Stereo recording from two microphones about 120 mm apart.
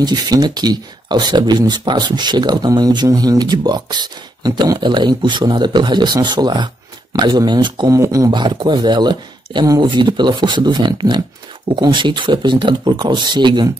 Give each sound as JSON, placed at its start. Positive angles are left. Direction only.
{"t": 0.0, "sound": "speech", "side_deg": -35}
{"t": 7.9, "sound": "speech", "side_deg": -25}
{"t": 8.3, "sound": "speech", "side_deg": -40}